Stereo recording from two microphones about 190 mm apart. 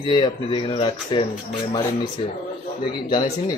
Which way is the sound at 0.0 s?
25° left (ahead or behind).